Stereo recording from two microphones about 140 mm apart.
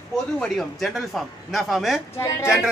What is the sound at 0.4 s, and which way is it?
Speech, centre (ahead or behind).